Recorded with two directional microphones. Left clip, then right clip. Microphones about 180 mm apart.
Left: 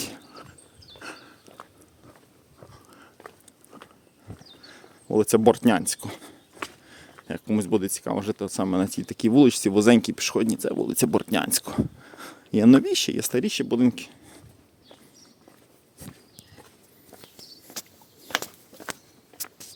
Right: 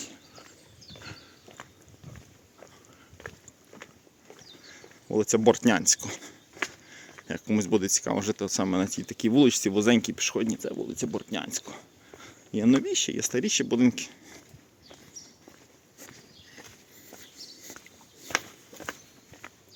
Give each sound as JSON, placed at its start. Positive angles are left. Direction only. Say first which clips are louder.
{"t": 4.7, "sound": "speech", "louder": "left 4 dB", "side_deg": 30}
{"t": 6.8, "sound": "a sound", "louder": "even", "side_deg": 25}
{"t": 7.3, "sound": "speech", "louder": "left 2 dB", "side_deg": 20}
{"t": 10.8, "sound": "speech", "louder": "left 9 dB", "side_deg": 55}